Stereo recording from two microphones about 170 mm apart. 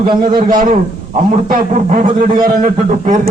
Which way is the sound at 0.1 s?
25° right (ahead or behind).